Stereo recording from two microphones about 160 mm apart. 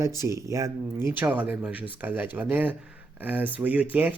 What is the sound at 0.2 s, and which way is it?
Speech, 20° right (ahead or behind).